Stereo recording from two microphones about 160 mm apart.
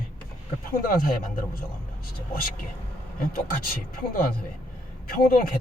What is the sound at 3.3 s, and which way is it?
Speech, 60° left (ahead or behind).